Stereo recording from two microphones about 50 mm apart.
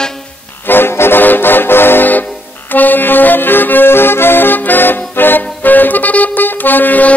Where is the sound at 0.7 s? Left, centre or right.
Left.